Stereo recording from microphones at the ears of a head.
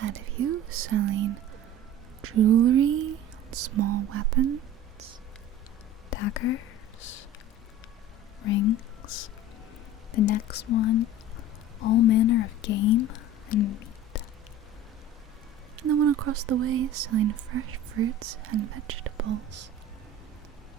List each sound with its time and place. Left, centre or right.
0.0 s speech: right
6.1 s whispering: left
8.4 s whispering: left
15.7 s speech: right